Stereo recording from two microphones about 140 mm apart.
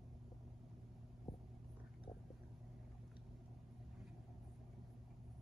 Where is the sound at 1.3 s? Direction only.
30° left (ahead or behind).